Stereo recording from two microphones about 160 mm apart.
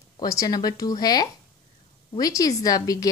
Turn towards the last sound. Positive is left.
turn(degrees=25)  # may be behind; listen again after turning